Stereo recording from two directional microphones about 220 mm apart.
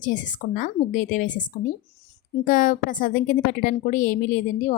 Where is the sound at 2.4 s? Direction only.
40° left (ahead or behind).